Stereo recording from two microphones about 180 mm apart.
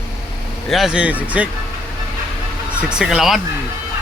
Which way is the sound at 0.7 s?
Centre (ahead or behind).